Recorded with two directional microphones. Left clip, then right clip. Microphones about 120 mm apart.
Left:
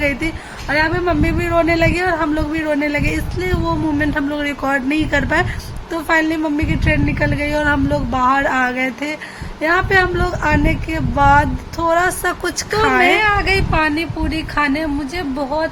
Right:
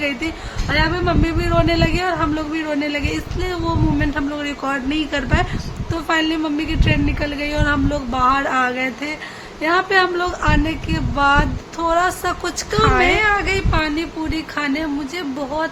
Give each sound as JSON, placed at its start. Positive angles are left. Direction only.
{"t": 0.0, "sound": "speech", "side_deg": 30}